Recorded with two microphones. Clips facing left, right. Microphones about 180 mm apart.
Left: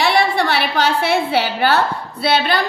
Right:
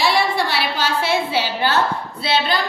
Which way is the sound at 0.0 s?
60° left (ahead or behind).